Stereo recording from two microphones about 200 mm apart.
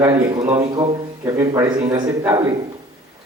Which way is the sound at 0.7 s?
20° right (ahead or behind).